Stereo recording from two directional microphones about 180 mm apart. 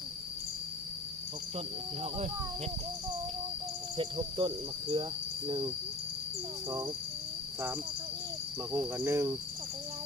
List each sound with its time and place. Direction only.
3.9 s cricket: 25° right (ahead or behind)
8.7 s cricket: 10° right (ahead or behind)